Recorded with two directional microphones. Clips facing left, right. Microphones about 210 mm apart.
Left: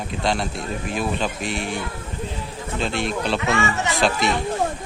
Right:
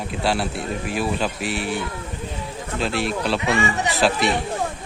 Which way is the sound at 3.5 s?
15° right (ahead or behind).